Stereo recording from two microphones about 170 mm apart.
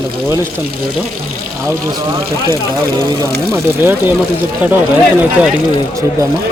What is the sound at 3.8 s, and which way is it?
Speech, 10° right (ahead or behind).